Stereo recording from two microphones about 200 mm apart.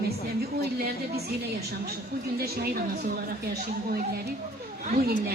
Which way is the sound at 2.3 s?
50° right (ahead or behind).